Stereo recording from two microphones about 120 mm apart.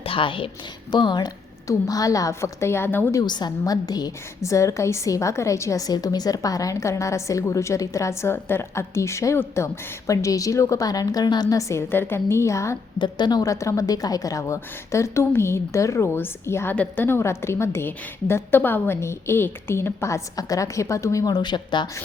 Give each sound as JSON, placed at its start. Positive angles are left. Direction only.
{"t": 0.0, "sound": "a woman's voice", "side_deg": 45}
{"t": 3.2, "sound": "a woman's voice", "side_deg": 35}
{"t": 13.0, "sound": "a woman's voice", "side_deg": 35}